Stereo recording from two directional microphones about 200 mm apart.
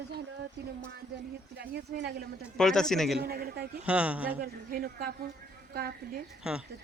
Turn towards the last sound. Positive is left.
turn(degrees=-5)  # may be behind; listen again after turning